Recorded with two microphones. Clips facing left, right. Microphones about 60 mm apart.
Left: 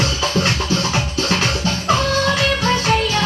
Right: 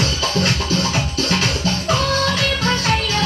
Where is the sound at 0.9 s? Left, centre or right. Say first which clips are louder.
Left 1 dB; centre.